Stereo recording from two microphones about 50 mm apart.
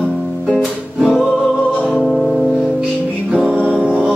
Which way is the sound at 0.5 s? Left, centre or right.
Centre.